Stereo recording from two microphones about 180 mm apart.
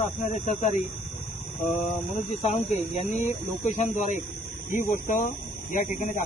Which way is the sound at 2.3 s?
35° left (ahead or behind).